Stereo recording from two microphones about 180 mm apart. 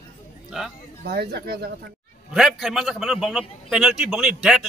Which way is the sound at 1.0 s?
60° right (ahead or behind).